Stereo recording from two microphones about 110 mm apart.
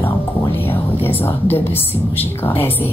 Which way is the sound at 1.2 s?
20° left (ahead or behind).